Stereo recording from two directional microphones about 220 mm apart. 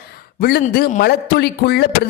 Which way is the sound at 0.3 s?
45° left (ahead or behind).